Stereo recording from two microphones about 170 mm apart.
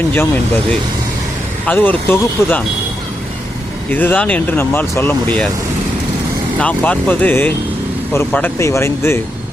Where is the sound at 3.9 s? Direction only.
10° left (ahead or behind).